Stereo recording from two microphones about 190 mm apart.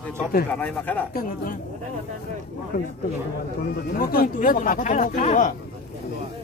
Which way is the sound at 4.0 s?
50° left (ahead or behind).